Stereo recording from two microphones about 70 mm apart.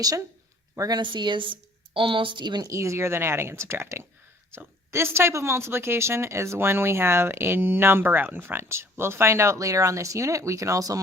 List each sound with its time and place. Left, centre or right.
0.8 s speech: right
2.3 s a woman's voice: right
2.6 s speech: right